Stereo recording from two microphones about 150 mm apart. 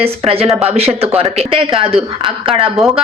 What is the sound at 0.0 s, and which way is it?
A woman's voice, 40° right (ahead or behind).